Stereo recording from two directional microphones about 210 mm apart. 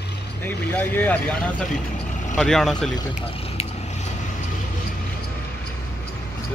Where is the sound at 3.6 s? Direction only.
30° left (ahead or behind).